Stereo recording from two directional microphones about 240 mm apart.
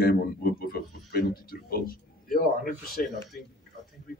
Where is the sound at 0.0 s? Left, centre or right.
Left.